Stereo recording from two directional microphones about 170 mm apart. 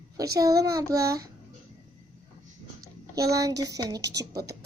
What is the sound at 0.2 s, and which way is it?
A woman's voice, 20° right (ahead or behind).